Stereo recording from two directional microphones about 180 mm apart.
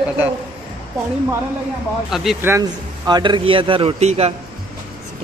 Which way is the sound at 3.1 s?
25° right (ahead or behind).